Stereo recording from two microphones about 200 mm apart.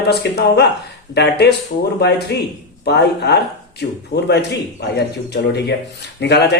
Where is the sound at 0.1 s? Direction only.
55° left (ahead or behind).